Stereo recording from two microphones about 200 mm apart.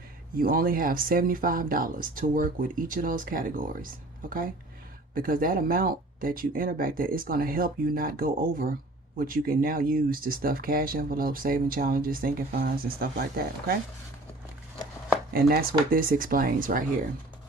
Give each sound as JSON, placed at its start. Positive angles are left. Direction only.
{"t": 0.3, "sound": "speech", "side_deg": -45}
{"t": 15.3, "sound": "speech", "side_deg": -50}